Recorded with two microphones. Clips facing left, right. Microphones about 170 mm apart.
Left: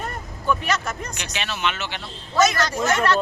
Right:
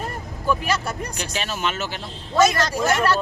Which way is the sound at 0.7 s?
35° right (ahead or behind).